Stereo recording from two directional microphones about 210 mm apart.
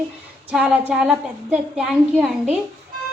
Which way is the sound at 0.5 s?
5° right (ahead or behind).